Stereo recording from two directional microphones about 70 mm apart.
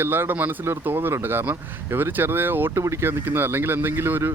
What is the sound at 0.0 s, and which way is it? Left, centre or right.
Speech, right.